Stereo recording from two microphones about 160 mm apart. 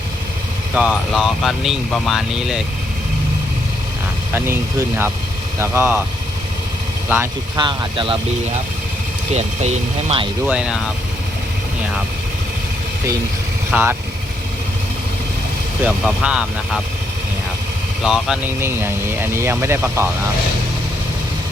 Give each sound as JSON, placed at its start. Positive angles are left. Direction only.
{"t": 0.7, "sound": "speech", "side_deg": -10}
{"t": 4.4, "sound": "speech", "side_deg": -15}
{"t": 7.5, "sound": "speech", "side_deg": -25}
{"t": 9.3, "sound": "speech", "side_deg": -45}
{"t": 10.4, "sound": "speech", "side_deg": -5}
{"t": 13.7, "sound": "speech", "side_deg": -10}
{"t": 15.8, "sound": "speech", "side_deg": -5}
{"t": 18.0, "sound": "speech", "side_deg": 0}
{"t": 18.6, "sound": "speech", "side_deg": -15}